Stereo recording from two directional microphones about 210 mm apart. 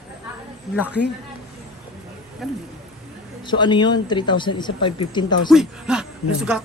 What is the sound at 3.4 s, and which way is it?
Speech, 20° left (ahead or behind).